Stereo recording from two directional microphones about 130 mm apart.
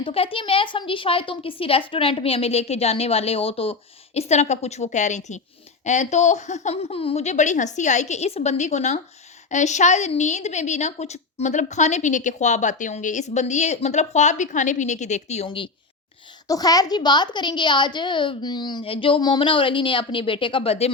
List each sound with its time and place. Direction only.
0.0 s a woman's voice: 45° left (ahead or behind); by 15.4 s 60° left (ahead or behind)
15.4 s a woman's voice: 40° left (ahead or behind)
16.5 s a woman's voice: 30° left (ahead or behind); by 20.9 s 50° left (ahead or behind)